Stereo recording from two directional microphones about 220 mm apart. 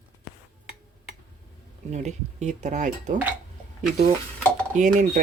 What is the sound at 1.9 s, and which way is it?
Speech, 30° right (ahead or behind).